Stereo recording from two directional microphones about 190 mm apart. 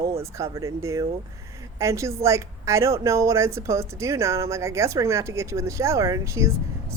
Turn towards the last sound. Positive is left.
turn(degrees=-15)  # may be behind; listen again after turning